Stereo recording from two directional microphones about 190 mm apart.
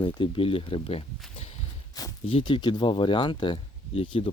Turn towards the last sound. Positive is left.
turn(degrees=30)  # may be behind; listen again after turning